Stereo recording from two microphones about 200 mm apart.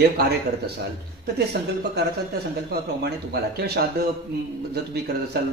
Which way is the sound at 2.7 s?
55° right (ahead or behind).